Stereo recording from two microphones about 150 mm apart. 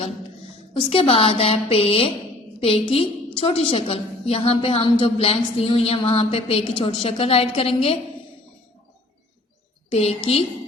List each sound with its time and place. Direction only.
0.7 s a woman's voice: 35° left (ahead or behind)
9.9 s a woman's voice: 40° left (ahead or behind)